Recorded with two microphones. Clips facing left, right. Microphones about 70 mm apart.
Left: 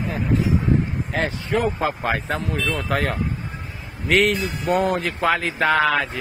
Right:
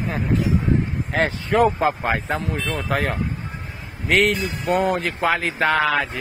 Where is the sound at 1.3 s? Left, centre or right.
Right.